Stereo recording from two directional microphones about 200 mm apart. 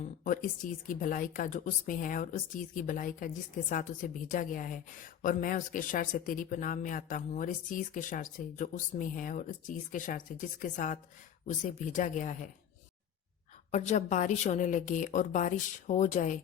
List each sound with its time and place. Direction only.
0.0 s speech: 40° left (ahead or behind)
13.7 s speech: 35° left (ahead or behind)